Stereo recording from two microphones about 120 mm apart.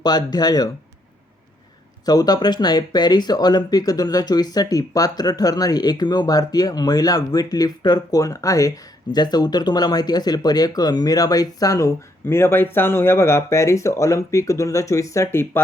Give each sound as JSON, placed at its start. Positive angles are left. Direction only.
{"t": 0.0, "sound": "speech", "side_deg": 35}
{"t": 2.0, "sound": "speech", "side_deg": 35}